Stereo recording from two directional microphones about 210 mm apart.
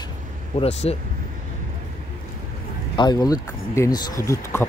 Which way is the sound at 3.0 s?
20° left (ahead or behind).